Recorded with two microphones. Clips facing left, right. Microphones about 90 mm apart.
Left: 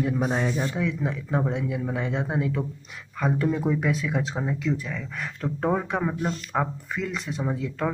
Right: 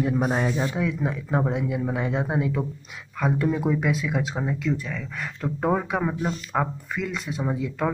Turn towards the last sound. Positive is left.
turn(degrees=-10)  # may be behind; listen again after turning